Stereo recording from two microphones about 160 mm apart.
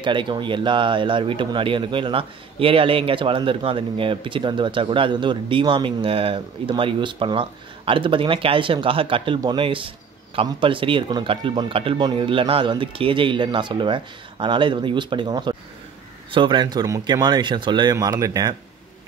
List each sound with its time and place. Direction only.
0.0 s speech: 30° right (ahead or behind)